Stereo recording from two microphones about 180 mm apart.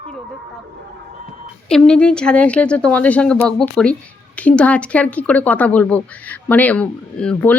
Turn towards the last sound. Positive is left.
turn(degrees=5)  # may be behind; listen again after turning